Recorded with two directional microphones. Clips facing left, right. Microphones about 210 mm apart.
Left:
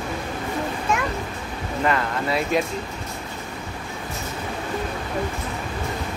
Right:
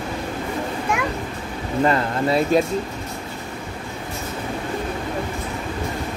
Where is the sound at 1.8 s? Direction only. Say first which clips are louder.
Right 4 dB; 35° right (ahead or behind).